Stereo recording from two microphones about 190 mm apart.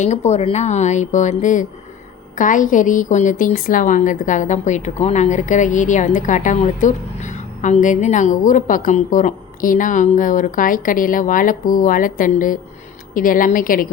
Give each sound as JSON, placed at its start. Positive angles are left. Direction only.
{"t": 0.0, "sound": "a woman's voice", "side_deg": 35}